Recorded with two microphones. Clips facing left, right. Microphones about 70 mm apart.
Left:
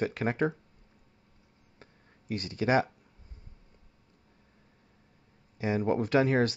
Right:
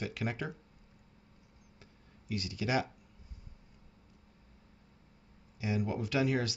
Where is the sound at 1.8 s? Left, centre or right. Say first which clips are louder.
Left 6 dB; left.